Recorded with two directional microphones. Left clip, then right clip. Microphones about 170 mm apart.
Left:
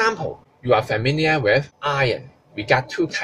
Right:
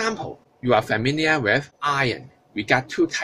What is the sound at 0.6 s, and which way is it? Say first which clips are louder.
Speech: left 1 dB; 50° right (ahead or behind).